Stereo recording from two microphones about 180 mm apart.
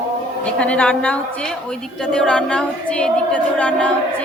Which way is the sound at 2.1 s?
5° left (ahead or behind).